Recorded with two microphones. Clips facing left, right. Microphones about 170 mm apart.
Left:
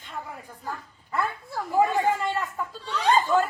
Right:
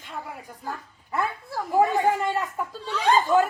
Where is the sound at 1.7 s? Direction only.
15° right (ahead or behind).